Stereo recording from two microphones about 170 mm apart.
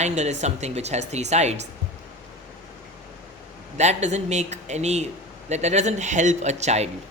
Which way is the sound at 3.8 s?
40° right (ahead or behind).